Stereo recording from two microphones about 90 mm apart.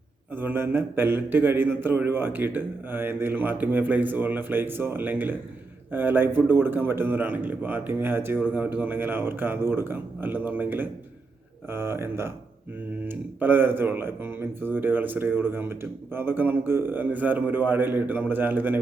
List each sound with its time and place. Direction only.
0.3 s speech: 25° right (ahead or behind)